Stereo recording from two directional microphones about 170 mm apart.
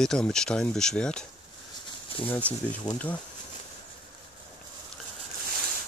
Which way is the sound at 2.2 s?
10° left (ahead or behind).